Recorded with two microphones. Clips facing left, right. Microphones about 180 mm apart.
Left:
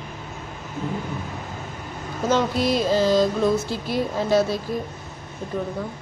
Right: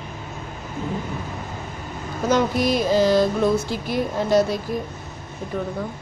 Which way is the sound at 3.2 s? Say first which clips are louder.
Right 1 dB; centre (ahead or behind).